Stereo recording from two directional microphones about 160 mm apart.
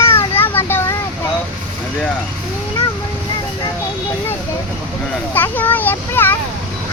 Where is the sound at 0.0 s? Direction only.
15° left (ahead or behind).